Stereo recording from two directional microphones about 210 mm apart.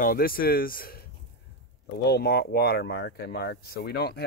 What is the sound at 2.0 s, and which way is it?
Speech, 50° left (ahead or behind).